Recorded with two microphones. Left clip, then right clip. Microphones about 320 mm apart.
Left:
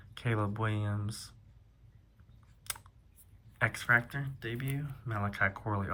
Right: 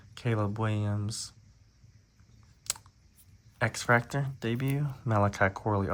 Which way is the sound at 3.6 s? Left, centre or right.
Centre.